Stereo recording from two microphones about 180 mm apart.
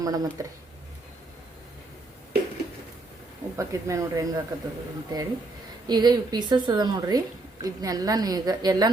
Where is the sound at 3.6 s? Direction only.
15° right (ahead or behind).